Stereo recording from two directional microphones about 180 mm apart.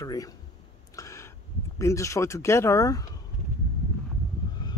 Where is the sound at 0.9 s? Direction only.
15° left (ahead or behind).